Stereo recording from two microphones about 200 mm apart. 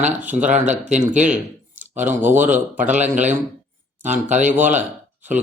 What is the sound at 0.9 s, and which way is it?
Speech, 35° right (ahead or behind).